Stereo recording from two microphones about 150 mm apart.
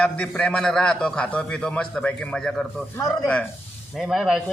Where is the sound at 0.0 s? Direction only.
10° left (ahead or behind).